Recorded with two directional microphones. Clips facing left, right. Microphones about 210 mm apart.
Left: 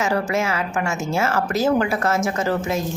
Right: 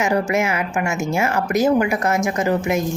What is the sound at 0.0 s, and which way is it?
A woman's voice, 20° right (ahead or behind).